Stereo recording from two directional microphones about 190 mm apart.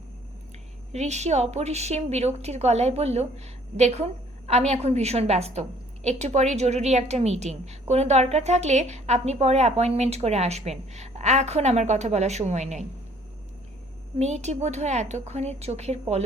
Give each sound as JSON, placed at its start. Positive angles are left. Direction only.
{"t": 0.9, "sound": "a woman's voice", "side_deg": -35}
{"t": 14.2, "sound": "a woman's voice", "side_deg": -35}